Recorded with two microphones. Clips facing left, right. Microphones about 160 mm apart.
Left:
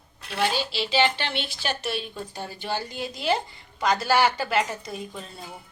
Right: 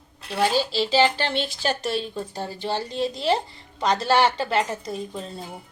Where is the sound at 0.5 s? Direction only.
35° right (ahead or behind).